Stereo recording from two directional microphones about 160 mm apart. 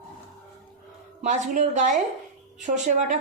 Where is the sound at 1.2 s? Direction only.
50° right (ahead or behind).